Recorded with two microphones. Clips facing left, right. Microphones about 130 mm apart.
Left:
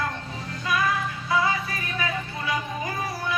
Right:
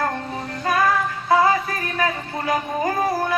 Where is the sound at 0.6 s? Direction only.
50° right (ahead or behind).